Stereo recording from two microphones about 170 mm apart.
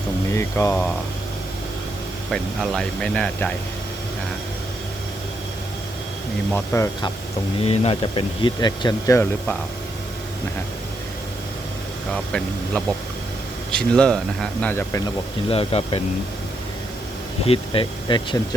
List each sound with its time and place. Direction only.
0.3 s speech: 15° left (ahead or behind)
2.3 s speech: centre (ahead or behind)
6.5 s speech: 15° left (ahead or behind)
7.6 s speech: 35° left (ahead or behind); by 9.6 s 15° left (ahead or behind)
12.1 s speech: 5° left (ahead or behind)
15.4 s speech: 35° left (ahead or behind)
17.4 s speech: 35° left (ahead or behind)